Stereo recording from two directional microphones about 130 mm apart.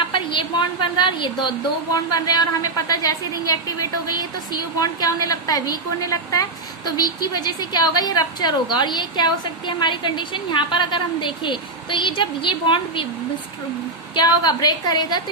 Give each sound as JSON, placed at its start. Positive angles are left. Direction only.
{"t": 0.1, "sound": "a woman's voice", "side_deg": 40}
{"t": 14.2, "sound": "a woman's voice", "side_deg": 30}